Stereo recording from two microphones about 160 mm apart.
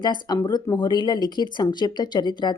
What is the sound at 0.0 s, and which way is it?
Speech, 25° left (ahead or behind).